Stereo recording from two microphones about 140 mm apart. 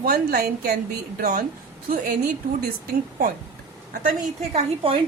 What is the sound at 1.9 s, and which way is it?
Speech, 90° right.